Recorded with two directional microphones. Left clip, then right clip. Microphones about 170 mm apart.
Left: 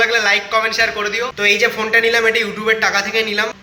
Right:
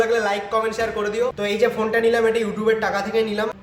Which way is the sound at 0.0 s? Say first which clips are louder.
Left 6 dB; 10° right (ahead or behind).